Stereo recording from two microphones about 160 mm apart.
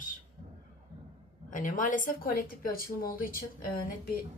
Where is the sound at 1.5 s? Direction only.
55° left (ahead or behind).